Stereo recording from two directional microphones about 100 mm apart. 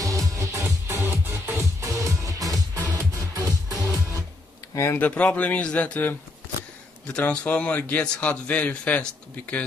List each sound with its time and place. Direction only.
0.0 s music: 35° right (ahead or behind)
4.9 s a man's voice: 15° left (ahead or behind)